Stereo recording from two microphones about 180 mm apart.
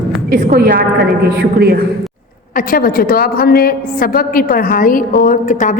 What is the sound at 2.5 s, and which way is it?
A woman's voice, 50° left (ahead or behind).